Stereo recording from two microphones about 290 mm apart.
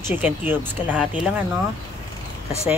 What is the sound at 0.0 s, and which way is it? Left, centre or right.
Speech, centre.